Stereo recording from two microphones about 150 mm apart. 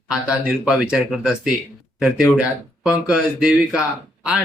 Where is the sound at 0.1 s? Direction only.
5° right (ahead or behind).